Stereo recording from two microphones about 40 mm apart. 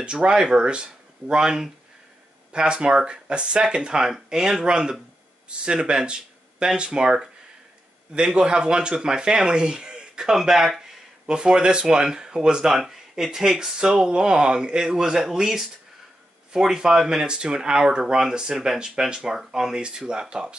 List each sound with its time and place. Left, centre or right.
0.0 s speech: right
8.3 s speech: right
10.3 s speech: centre
11.2 s speech: centre